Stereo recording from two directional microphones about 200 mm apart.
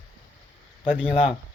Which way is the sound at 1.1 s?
30° left (ahead or behind).